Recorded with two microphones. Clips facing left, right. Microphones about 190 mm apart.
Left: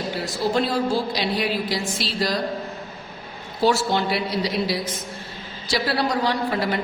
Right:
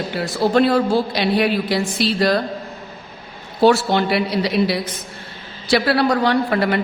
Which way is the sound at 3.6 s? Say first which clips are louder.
Right 5 dB; 65° right (ahead or behind).